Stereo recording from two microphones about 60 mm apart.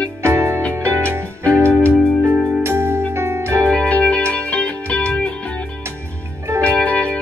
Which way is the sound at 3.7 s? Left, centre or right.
Centre.